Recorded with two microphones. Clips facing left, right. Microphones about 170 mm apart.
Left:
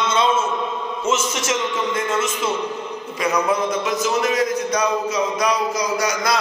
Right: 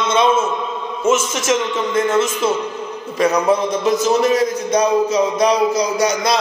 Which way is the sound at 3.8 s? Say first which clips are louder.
Right 5 dB; 30° right (ahead or behind).